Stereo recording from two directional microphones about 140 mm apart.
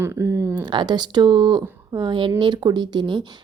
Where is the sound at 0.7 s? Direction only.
30° right (ahead or behind).